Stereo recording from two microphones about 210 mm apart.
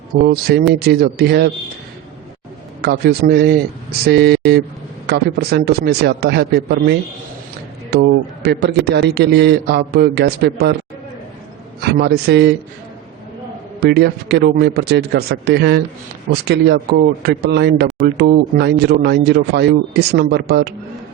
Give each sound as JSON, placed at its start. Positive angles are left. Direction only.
{"t": 0.1, "sound": "speech", "side_deg": -45}
{"t": 2.8, "sound": "speech", "side_deg": -50}
{"t": 7.9, "sound": "a man's voice", "side_deg": -50}
{"t": 11.8, "sound": "speech", "side_deg": -50}
{"t": 13.7, "sound": "speech", "side_deg": -50}